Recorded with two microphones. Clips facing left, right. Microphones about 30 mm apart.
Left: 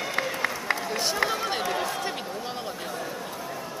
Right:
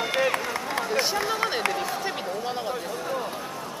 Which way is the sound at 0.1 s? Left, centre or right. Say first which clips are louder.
Right 6 dB; right.